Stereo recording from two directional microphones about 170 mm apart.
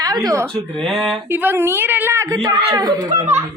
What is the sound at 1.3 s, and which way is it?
Speech, 10° right (ahead or behind).